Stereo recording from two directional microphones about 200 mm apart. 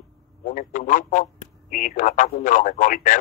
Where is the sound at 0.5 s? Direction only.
40° left (ahead or behind).